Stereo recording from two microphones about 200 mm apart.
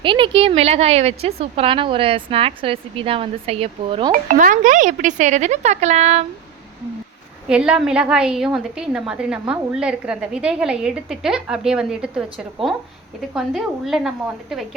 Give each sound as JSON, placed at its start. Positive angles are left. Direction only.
{"t": 0.0, "sound": "a woman's voice", "side_deg": -25}
{"t": 4.1, "sound": "speech", "side_deg": -40}
{"t": 7.4, "sound": "a woman's voice", "side_deg": -5}